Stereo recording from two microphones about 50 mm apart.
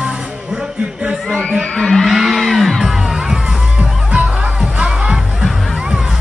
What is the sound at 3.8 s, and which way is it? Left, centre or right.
Music, right.